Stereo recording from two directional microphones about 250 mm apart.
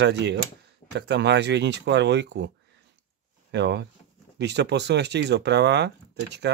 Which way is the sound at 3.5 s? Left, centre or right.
Right.